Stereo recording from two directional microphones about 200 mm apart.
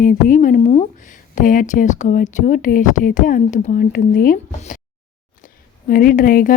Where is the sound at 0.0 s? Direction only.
40° left (ahead or behind).